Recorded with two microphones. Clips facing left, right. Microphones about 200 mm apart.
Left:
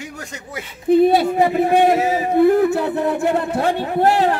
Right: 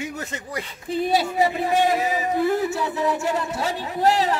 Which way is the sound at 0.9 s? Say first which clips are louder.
Left 9 dB; 55° left (ahead or behind).